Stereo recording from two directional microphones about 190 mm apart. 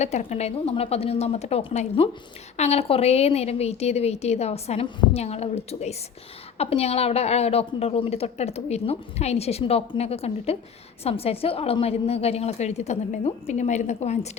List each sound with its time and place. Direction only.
0.0 s a woman's voice: 35° left (ahead or behind)